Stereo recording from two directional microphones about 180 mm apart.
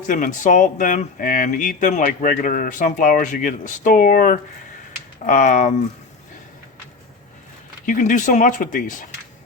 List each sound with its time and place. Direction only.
0.1 s speech: 45° left (ahead or behind)
7.9 s speech: 45° left (ahead or behind)